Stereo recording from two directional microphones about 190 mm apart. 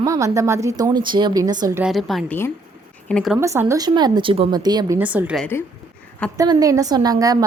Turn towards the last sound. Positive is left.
turn(degrees=-20)  # may be behind; listen again after turning